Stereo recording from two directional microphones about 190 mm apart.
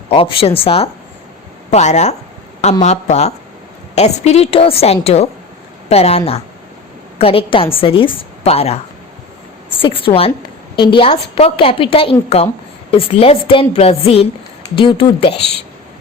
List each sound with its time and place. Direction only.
0.1 s a woman's voice: 30° left (ahead or behind)